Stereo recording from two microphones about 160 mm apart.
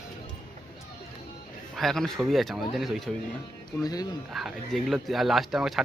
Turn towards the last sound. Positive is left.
turn(degrees=0)  # may be behind; listen again after turning